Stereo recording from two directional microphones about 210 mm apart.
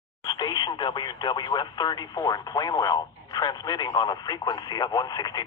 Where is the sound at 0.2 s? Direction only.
20° left (ahead or behind).